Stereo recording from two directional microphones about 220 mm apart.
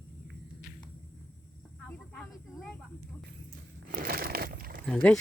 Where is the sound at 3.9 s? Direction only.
40° right (ahead or behind).